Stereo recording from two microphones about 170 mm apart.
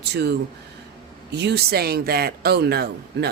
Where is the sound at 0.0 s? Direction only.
75° right (ahead or behind).